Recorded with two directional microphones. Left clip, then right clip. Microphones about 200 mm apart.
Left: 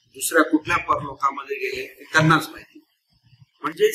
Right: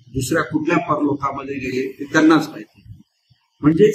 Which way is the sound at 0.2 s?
20° left (ahead or behind).